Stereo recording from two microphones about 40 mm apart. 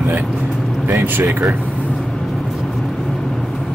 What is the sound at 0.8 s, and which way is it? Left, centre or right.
Speech, right.